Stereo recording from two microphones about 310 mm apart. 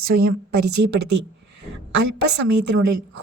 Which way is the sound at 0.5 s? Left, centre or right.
Right.